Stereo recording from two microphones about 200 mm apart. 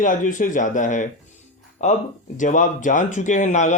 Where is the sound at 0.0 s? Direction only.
40° left (ahead or behind).